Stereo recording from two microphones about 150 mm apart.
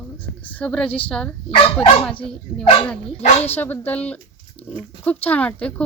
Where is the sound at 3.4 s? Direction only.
15° left (ahead or behind).